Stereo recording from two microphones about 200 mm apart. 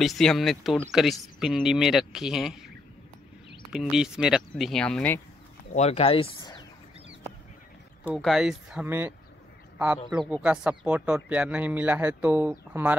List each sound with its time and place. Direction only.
0.0 s speech: centre (ahead or behind)
3.7 s speech: 5° right (ahead or behind)
5.8 s speech: 30° left (ahead or behind)
8.0 s speech: 5° right (ahead or behind)